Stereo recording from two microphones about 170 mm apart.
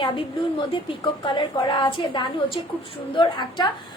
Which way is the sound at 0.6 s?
30° left (ahead or behind).